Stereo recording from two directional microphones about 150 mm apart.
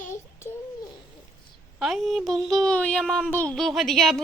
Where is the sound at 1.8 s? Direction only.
Centre (ahead or behind).